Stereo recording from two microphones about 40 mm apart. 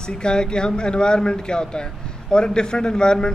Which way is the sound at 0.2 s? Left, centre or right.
Left.